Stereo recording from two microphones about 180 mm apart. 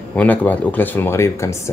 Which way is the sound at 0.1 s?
10° left (ahead or behind).